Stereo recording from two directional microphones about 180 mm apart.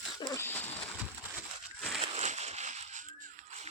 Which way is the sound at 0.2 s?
20° left (ahead or behind).